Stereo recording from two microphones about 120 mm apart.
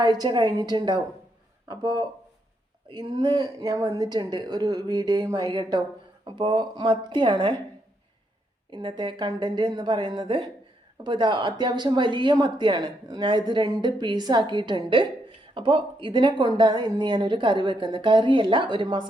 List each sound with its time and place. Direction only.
0.0 s speech: 35° right (ahead or behind)
8.7 s speech: 40° right (ahead or behind)